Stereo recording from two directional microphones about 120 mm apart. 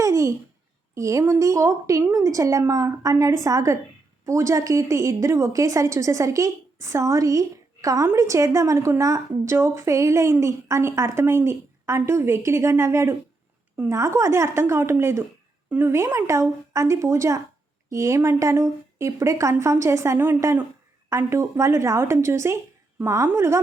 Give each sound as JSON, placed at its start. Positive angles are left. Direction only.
{"t": 0.0, "sound": "babbling", "side_deg": -25}
{"t": 0.9, "sound": "a woman's voice", "side_deg": -25}